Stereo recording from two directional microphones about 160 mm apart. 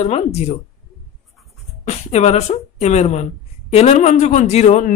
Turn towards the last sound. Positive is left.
turn(degrees=45)  # may be behind; listen again after turning